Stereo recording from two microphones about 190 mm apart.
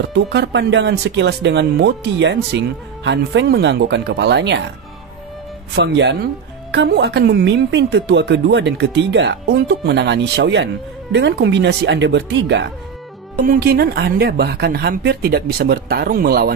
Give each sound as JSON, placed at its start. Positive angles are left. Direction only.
{"t": 0.1, "sound": "speech", "side_deg": -65}
{"t": 5.8, "sound": "a woman's voice", "side_deg": -65}
{"t": 13.4, "sound": "a woman's voice", "side_deg": -50}